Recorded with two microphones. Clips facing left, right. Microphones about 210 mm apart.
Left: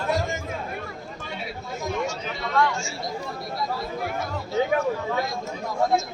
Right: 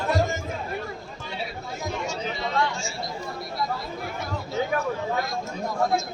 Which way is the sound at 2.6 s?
20° right (ahead or behind).